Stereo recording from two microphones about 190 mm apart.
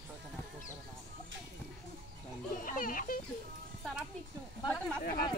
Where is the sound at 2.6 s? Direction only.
45° left (ahead or behind).